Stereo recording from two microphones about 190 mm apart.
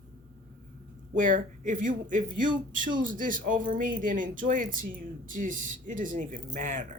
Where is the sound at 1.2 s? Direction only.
45° right (ahead or behind).